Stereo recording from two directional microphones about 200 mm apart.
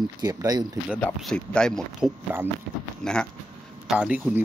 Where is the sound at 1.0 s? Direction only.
5° left (ahead or behind).